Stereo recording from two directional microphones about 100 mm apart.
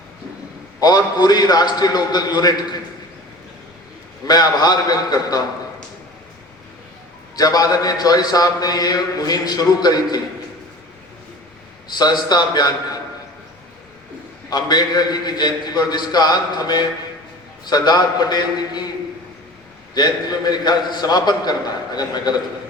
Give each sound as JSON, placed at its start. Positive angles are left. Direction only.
{"t": 0.8, "sound": "a man's voice", "side_deg": 40}
{"t": 4.3, "sound": "a man's voice", "side_deg": 40}
{"t": 7.3, "sound": "a man's voice", "side_deg": 40}
{"t": 11.9, "sound": "a man's voice", "side_deg": 45}
{"t": 14.5, "sound": "a man's voice", "side_deg": 45}
{"t": 19.9, "sound": "a man's voice", "side_deg": 45}